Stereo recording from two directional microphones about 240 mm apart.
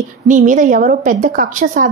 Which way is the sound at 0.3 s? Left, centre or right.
Right.